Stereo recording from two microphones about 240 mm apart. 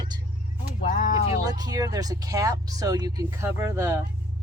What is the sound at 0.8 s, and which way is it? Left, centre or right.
Speech, left.